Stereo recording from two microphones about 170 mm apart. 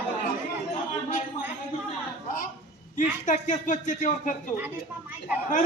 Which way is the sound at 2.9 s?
50° left (ahead or behind).